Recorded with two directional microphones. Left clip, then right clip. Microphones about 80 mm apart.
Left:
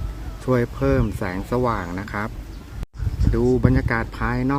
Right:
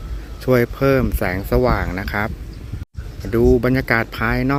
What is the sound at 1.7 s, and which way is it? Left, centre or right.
Speech, right.